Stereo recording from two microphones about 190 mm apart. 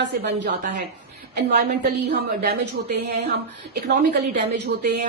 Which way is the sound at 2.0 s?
55° right (ahead or behind).